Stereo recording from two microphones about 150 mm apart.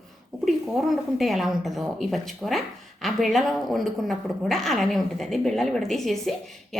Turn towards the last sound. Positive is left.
turn(degrees=0)  # may be behind; listen again after turning